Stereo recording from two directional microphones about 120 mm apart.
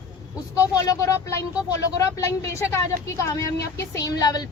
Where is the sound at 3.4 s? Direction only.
25° left (ahead or behind).